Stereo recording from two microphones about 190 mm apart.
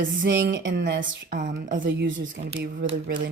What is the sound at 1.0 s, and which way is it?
Speech, 45° right (ahead or behind).